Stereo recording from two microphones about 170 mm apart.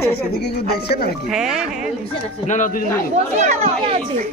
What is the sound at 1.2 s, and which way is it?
Speech, 5° right (ahead or behind).